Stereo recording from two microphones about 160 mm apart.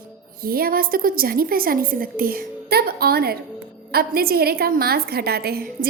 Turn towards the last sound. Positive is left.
turn(degrees=-75)  # may be behind; listen again after turning